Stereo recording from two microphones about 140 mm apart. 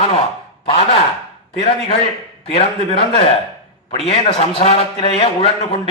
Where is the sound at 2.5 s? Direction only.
40° left (ahead or behind).